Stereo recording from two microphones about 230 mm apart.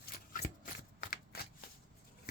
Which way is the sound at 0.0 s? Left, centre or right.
Left.